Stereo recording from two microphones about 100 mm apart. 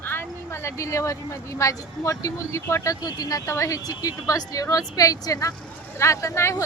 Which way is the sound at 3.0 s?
40° left (ahead or behind).